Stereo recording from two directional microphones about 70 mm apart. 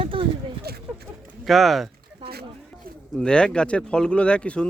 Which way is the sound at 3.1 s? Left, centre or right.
Centre.